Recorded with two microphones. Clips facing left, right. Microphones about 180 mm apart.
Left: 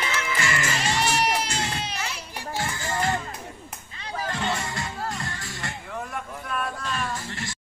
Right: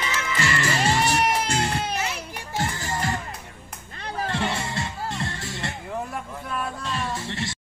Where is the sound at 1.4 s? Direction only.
55° right (ahead or behind).